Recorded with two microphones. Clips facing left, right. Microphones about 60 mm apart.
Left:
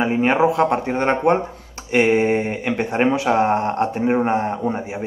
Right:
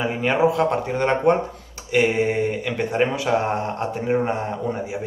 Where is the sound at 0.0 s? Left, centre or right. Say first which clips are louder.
Left 3 dB; left.